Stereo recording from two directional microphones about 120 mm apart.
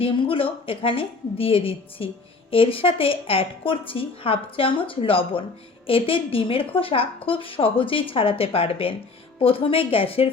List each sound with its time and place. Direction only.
0.0 s a woman's voice: 45° left (ahead or behind)